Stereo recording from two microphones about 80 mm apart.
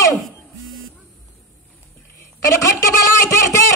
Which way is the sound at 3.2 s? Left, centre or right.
Left.